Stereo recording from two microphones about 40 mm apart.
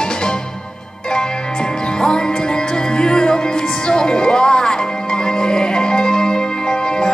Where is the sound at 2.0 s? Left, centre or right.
Centre.